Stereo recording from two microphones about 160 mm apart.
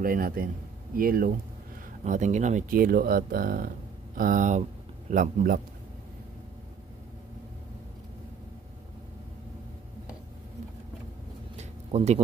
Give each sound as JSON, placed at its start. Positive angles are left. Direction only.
{"t": 0.0, "sound": "speech", "side_deg": -65}
{"t": 2.0, "sound": "speech", "side_deg": -50}
{"t": 11.5, "sound": "a sound", "side_deg": -45}